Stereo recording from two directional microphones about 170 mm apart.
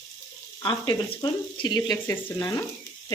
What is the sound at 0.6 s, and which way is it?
Speech, 25° left (ahead or behind).